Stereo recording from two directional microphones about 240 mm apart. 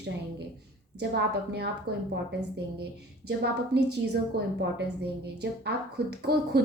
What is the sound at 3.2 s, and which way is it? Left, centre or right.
Speech, right.